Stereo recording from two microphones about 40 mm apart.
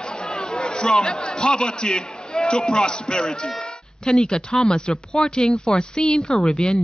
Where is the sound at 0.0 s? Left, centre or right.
Left.